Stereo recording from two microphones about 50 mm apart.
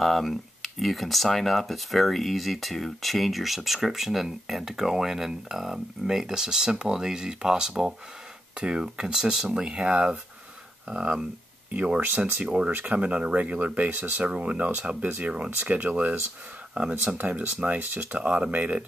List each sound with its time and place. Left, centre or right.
0.0 s speech: centre; by 18.9 s right